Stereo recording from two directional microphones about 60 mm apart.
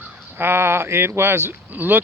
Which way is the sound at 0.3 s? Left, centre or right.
Right.